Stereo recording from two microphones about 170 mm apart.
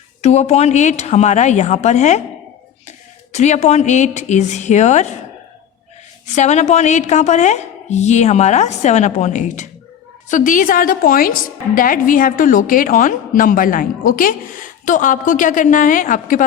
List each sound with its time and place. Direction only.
0.2 s a woman's voice: 40° left (ahead or behind)
3.3 s a woman's voice: 40° left (ahead or behind)
6.3 s a woman's voice: 45° left (ahead or behind)